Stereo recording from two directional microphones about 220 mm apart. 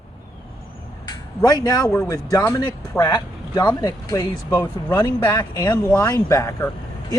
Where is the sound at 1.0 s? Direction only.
20° left (ahead or behind).